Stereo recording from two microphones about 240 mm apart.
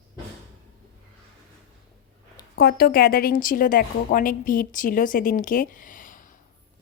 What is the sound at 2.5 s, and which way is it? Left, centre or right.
A woman's voice, left.